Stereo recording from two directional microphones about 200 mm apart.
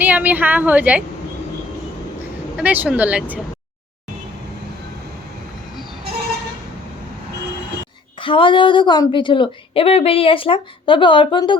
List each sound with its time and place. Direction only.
0.0 s a woman's voice: 10° right (ahead or behind)
2.6 s a woman's voice: 10° right (ahead or behind)
8.2 s a woman's voice: 25° left (ahead or behind)